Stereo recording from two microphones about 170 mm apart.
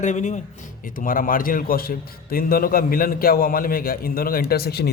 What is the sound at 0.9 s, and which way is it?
A man's voice, 55° left (ahead or behind).